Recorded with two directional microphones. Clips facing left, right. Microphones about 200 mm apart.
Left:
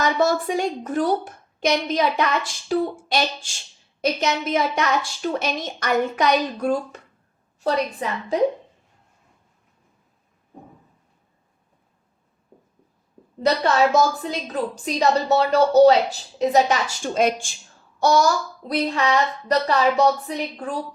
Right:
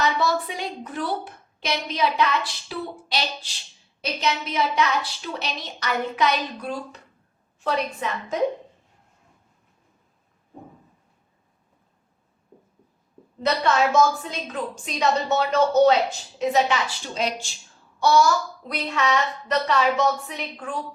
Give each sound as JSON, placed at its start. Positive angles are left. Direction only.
{"t": 0.0, "sound": "a woman's voice", "side_deg": 45}
{"t": 7.6, "sound": "a woman's voice", "side_deg": 35}
{"t": 13.4, "sound": "a woman's voice", "side_deg": 35}